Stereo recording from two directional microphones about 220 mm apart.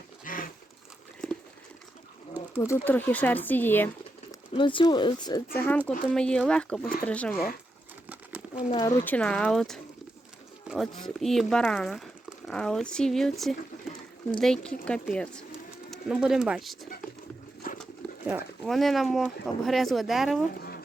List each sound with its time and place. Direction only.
0.3 s a sound: 40° left (ahead or behind)
2.6 s speech: 10° left (ahead or behind)
4.3 s speech: 20° left (ahead or behind)
5.5 s speech: 10° left (ahead or behind)
8.1 s bird: 5° right (ahead or behind)
8.7 s speech: 20° left (ahead or behind)
9.0 s speech: 5° left (ahead or behind)
17.6 s a sound: 40° left (ahead or behind)
18.3 s speech: 5° right (ahead or behind)
20.5 s a sound: 45° left (ahead or behind)